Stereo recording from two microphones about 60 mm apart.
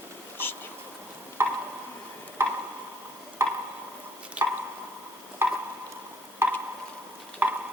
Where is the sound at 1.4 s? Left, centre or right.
Right.